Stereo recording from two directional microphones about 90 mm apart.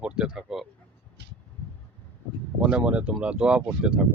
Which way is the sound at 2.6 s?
15° right (ahead or behind).